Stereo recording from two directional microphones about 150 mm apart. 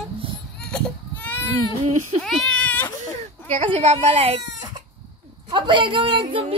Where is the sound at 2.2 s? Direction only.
Centre (ahead or behind).